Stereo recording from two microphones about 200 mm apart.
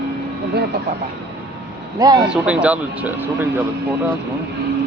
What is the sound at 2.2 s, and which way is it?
Speech, 5° right (ahead or behind).